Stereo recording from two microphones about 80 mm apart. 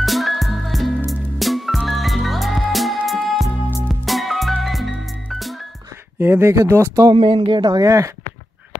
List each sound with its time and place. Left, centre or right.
0.0 s music: centre
6.1 s speech: right
7.1 s speech: right
7.8 s speech: right